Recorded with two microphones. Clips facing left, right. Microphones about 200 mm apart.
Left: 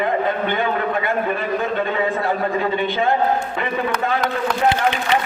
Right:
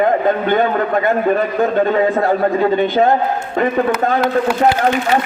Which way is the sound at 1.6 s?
45° right (ahead or behind).